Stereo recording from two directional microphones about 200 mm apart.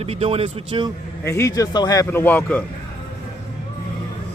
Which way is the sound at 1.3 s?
15° left (ahead or behind).